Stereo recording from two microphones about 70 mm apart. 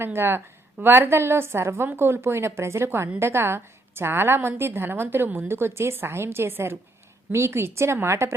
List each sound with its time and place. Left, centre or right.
0.0 s a woman's voice: right